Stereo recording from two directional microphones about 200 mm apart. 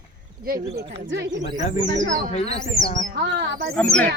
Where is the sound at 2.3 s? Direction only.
30° left (ahead or behind).